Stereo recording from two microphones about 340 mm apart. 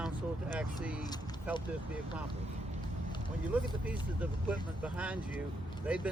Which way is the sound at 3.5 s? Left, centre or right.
Centre.